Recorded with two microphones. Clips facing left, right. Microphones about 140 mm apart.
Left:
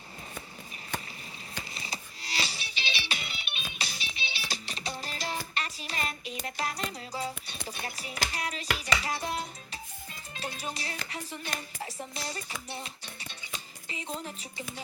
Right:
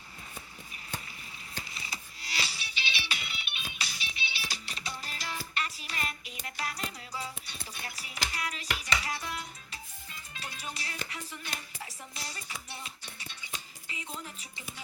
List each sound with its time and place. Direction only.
1.7 s music: 25° left (ahead or behind)
3.8 s music: 25° left (ahead or behind)
7.7 s a sound: 35° left (ahead or behind)
8.0 s music: 30° left (ahead or behind)
8.8 s cutlery: 30° left (ahead or behind)
10.4 s music: 30° left (ahead or behind)
11.1 s speech: 30° left (ahead or behind)
11.5 s music: 35° left (ahead or behind)
13.8 s speech: 25° left (ahead or behind)